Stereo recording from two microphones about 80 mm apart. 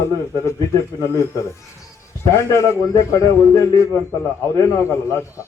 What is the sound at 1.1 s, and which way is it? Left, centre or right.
A man's voice, left.